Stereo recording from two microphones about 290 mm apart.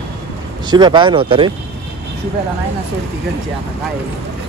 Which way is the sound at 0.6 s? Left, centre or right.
Centre.